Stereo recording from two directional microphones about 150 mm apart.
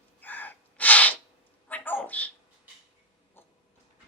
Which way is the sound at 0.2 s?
10° left (ahead or behind).